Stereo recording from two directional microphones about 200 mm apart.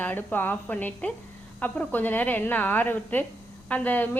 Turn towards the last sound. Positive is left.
turn(degrees=10)  # may be behind; listen again after turning